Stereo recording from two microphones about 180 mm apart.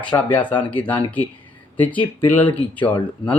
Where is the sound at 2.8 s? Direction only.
25° left (ahead or behind).